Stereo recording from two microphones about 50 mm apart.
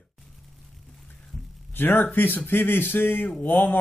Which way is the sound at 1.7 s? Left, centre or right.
Left.